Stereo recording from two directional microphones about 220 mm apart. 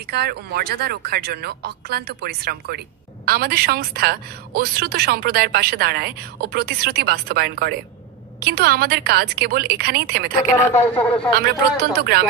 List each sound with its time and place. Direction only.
0.1 s a woman's voice: 45° right (ahead or behind)
10.7 s speech: 10° left (ahead or behind)
11.3 s a woman's voice: 45° right (ahead or behind)